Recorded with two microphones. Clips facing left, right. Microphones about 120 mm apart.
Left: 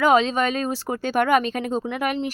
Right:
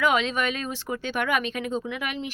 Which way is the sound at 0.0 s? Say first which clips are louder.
Left 5 dB; 35° left (ahead or behind).